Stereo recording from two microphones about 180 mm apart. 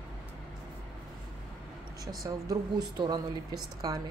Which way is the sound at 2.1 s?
20° right (ahead or behind).